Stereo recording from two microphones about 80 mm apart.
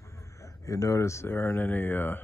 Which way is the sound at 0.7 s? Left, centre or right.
Left.